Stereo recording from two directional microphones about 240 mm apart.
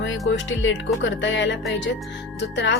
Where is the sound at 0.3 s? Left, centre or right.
Left.